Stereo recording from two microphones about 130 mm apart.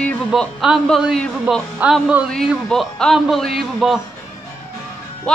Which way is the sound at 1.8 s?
15° right (ahead or behind).